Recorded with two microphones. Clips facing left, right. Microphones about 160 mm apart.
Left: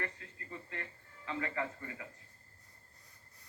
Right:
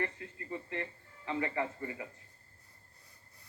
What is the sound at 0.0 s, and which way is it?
Music, 20° right (ahead or behind).